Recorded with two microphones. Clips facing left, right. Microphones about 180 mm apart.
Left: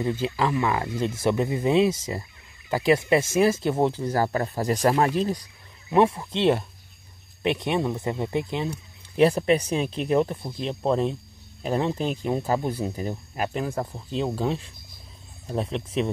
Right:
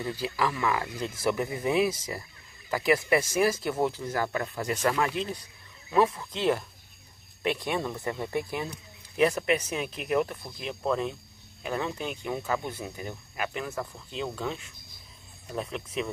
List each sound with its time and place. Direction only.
0.0 s speech: 25° left (ahead or behind); by 5.4 s 40° left (ahead or behind)
5.9 s speech: 25° left (ahead or behind)